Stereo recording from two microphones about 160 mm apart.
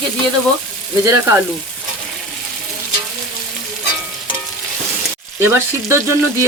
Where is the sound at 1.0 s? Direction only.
15° right (ahead or behind).